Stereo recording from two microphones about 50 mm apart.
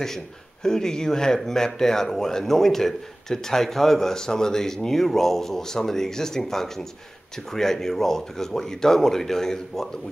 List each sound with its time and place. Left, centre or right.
0.7 s speech: centre